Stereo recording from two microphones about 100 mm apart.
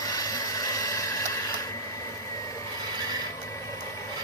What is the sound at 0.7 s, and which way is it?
Printer, 35° left (ahead or behind).